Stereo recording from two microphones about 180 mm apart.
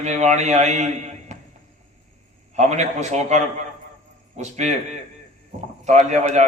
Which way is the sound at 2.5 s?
40° right (ahead or behind).